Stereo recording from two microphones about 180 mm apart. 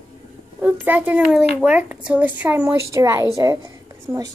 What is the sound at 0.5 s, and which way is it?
A child's voice, 10° right (ahead or behind).